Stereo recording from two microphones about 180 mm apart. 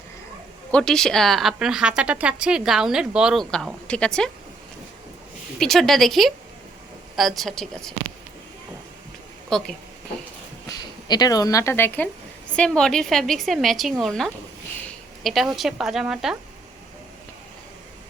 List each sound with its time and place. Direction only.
0.7 s a woman's voice: 5° left (ahead or behind)
5.5 s a woman's voice: centre (ahead or behind)
9.5 s a woman's voice: 5° left (ahead or behind)
10.7 s a woman's voice: 20° left (ahead or behind); by 16.4 s 5° right (ahead or behind)